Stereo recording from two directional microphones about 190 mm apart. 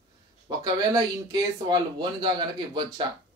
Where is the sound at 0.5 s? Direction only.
20° right (ahead or behind).